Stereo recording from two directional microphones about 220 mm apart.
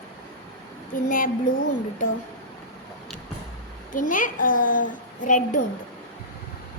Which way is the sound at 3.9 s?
40° left (ahead or behind).